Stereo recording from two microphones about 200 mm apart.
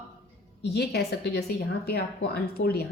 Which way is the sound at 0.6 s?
55° left (ahead or behind).